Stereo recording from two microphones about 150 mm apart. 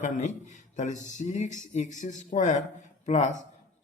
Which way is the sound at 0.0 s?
55° left (ahead or behind).